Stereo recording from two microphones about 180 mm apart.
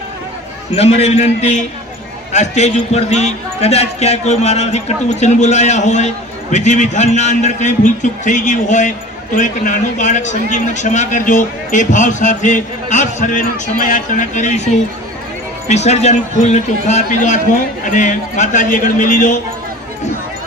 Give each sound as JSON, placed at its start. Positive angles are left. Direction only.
{"t": 0.8, "sound": "a man's voice", "side_deg": 35}
{"t": 15.7, "sound": "a man's voice", "side_deg": 40}